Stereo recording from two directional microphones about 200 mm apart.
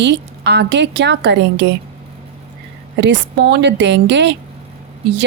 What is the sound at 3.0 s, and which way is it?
A woman's voice, 60° right (ahead or behind).